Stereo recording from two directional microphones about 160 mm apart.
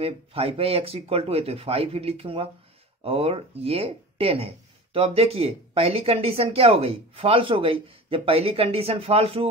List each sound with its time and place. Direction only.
0.0 s speech: 35° right (ahead or behind)